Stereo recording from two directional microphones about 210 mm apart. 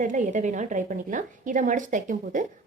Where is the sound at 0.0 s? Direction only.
35° right (ahead or behind).